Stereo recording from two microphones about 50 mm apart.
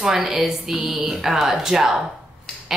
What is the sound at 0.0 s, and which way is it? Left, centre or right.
A woman's voice, centre.